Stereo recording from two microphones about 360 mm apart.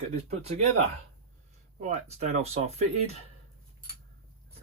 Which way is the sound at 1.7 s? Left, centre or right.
Centre.